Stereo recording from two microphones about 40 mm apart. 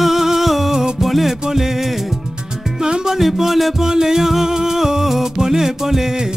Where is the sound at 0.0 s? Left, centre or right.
Centre.